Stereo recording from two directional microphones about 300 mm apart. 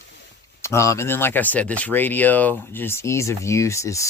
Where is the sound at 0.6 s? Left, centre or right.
Centre.